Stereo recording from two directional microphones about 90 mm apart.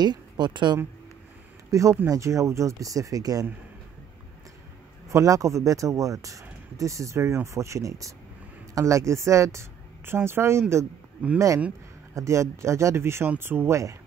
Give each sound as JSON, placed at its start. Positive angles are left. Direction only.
{"t": 0.0, "sound": "a woman's voice", "side_deg": -55}
{"t": 1.7, "sound": "speech", "side_deg": -35}
{"t": 5.1, "sound": "a woman's voice", "side_deg": -35}